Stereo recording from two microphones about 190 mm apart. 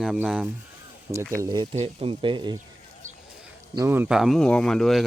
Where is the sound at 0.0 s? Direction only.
5° right (ahead or behind).